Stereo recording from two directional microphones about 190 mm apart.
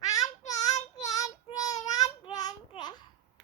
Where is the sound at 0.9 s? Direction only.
20° left (ahead or behind).